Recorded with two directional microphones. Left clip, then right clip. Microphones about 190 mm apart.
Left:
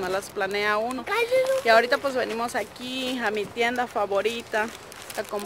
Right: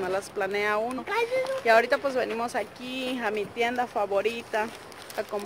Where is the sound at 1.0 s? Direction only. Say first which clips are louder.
Left 4 dB; 50° left (ahead or behind).